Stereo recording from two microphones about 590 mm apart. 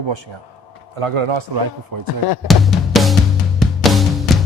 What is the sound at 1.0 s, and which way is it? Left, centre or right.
Speech, right.